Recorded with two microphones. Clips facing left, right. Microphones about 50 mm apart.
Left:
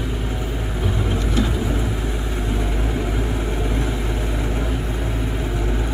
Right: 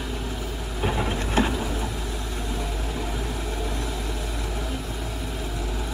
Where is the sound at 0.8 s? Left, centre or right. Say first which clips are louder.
Left 1 dB; right.